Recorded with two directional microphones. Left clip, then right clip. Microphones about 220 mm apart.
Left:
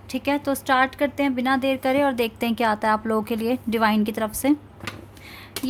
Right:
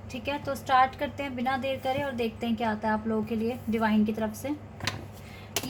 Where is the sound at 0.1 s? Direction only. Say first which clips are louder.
Left 8 dB; 50° left (ahead or behind).